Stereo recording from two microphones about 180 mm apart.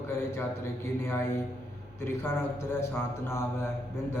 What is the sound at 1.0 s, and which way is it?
Speech, 15° left (ahead or behind).